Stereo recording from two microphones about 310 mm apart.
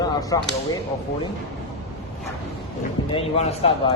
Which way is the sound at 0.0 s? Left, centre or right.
Centre.